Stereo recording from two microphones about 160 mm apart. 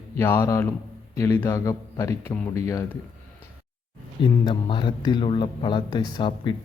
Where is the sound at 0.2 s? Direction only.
15° left (ahead or behind).